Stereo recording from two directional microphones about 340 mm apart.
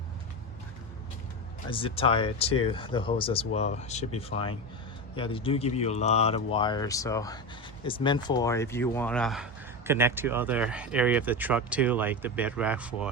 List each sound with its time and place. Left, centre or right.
1.7 s speech: centre